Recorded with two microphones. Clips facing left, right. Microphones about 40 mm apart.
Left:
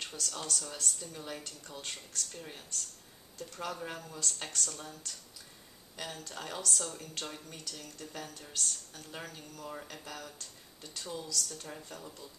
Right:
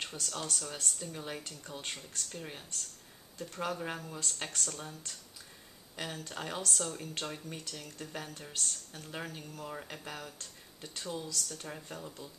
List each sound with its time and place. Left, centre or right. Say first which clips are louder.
0.0 s speech: right 1 dB; centre